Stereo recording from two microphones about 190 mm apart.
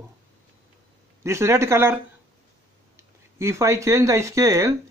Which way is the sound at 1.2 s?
15° right (ahead or behind).